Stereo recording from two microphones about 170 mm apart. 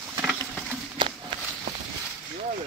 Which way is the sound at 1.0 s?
30° right (ahead or behind).